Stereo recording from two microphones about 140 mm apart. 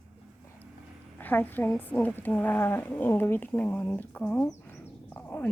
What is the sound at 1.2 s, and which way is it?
A woman's voice, 15° left (ahead or behind).